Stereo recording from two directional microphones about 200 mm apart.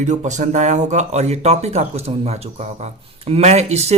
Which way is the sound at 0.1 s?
35° right (ahead or behind).